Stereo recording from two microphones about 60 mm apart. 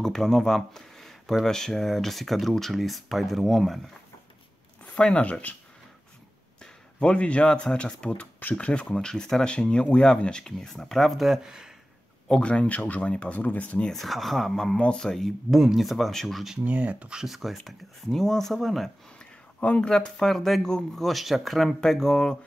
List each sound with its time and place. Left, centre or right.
0.0 s speech: centre
4.8 s speech: centre
6.6 s speech: centre
8.8 s speech: centre
12.3 s speech: centre
13.9 s speech: centre
16.6 s speech: right
17.2 s speech: centre
19.1 s speech: centre